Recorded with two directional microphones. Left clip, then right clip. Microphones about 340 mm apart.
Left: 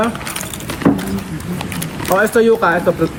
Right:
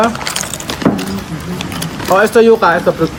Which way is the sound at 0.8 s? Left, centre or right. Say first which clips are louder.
Even; centre.